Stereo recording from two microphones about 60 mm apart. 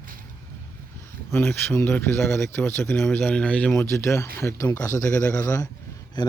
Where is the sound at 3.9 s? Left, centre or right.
Left.